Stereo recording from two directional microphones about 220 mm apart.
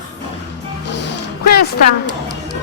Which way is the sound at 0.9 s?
50° left (ahead or behind).